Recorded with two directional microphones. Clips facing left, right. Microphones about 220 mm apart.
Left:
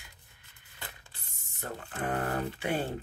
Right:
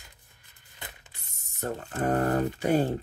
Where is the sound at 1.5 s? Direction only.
45° right (ahead or behind).